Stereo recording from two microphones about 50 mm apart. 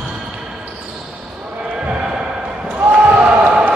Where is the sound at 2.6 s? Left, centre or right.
Right.